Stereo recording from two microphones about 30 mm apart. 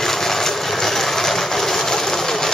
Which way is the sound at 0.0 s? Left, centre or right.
Centre.